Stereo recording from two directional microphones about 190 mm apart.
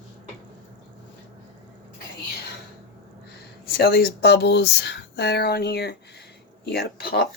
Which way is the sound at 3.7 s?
55° left (ahead or behind).